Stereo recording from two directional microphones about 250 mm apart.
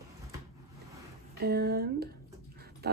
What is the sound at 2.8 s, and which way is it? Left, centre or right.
Speech, right.